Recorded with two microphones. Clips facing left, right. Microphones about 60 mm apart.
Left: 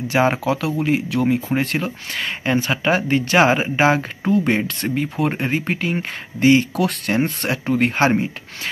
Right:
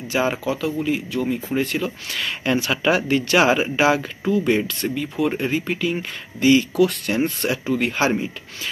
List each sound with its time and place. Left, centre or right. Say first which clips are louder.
0.1 s speech: left 4 dB; left
0.5 s speech: left 2 dB; left
0.7 s speech: left 3 dB; left
1.2 s speech: left 3 dB; left
2.1 s speech: left 2 dB; left